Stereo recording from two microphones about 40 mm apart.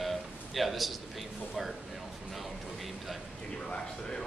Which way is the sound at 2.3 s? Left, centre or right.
Centre.